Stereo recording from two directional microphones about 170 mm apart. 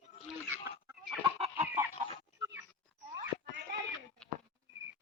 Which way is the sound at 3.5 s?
80° right.